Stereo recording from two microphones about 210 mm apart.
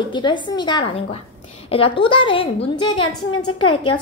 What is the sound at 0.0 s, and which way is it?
A woman's voice, 20° left (ahead or behind).